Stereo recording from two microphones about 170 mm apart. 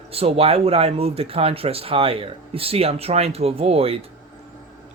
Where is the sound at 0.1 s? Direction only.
35° right (ahead or behind).